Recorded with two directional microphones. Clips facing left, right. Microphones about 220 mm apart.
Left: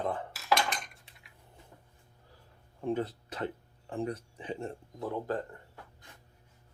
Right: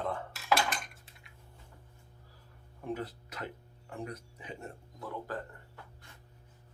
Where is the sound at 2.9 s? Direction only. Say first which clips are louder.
Left 6 dB; 30° left (ahead or behind).